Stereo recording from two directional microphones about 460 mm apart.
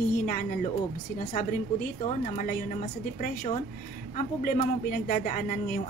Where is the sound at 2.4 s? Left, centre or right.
Centre.